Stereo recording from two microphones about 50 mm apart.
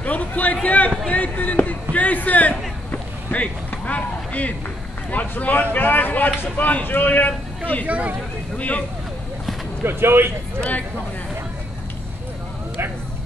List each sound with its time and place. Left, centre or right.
0.0 s a sound: left
5.1 s speech: left
7.8 s speech: right
8.5 s speech: left
9.8 s speech: right
10.6 s speech: left